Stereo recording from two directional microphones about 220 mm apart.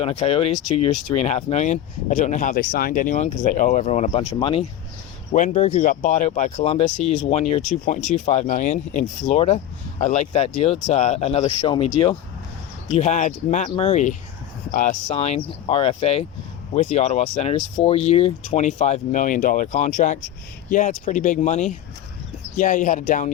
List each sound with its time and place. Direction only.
0.0 s speech: 25° left (ahead or behind)
12.9 s speech: 35° left (ahead or behind)